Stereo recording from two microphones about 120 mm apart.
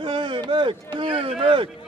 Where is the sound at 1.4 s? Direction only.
45° right (ahead or behind).